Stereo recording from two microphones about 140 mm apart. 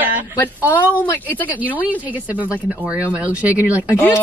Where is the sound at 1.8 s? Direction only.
10° right (ahead or behind).